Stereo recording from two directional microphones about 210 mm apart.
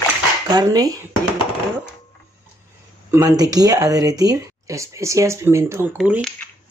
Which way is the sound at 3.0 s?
15° right (ahead or behind).